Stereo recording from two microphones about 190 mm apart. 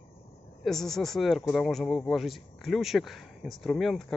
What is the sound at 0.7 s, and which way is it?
Speech, centre (ahead or behind).